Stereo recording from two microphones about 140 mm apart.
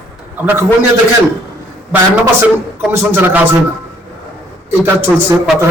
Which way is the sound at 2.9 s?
15° right (ahead or behind).